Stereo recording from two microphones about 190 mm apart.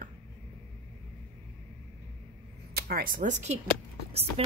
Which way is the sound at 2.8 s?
55° right (ahead or behind).